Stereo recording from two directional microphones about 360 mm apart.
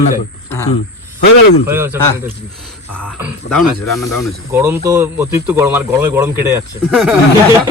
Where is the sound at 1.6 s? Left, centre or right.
Centre.